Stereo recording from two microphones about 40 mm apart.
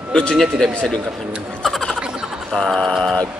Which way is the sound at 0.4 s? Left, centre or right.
Centre.